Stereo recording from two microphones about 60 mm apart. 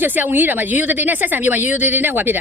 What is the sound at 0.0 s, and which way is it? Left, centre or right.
A man's voice, right.